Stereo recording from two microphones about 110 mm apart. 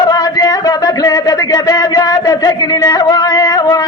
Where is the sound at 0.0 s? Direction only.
40° left (ahead or behind).